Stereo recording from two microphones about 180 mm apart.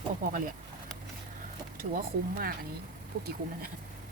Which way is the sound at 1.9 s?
55° right (ahead or behind).